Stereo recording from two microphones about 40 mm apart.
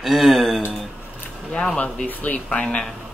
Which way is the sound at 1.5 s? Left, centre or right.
Left.